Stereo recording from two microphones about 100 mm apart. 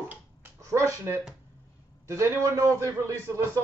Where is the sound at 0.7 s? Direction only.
30° right (ahead or behind).